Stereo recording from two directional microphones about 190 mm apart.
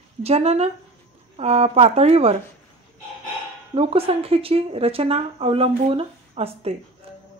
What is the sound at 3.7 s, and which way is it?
A woman's voice, 30° right (ahead or behind).